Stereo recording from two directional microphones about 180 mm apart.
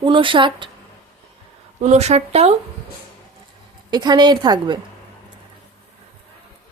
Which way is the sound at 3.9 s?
25° right (ahead or behind).